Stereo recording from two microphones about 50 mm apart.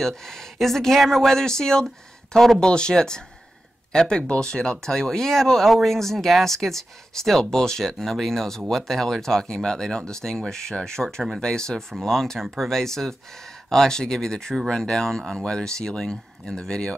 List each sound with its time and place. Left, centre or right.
0.0 s speech: centre
2.6 s speech: centre